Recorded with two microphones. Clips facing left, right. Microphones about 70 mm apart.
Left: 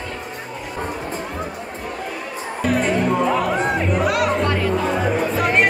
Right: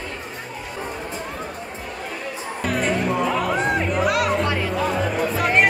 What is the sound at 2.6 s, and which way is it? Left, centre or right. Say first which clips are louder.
Music: left 3 dB; centre.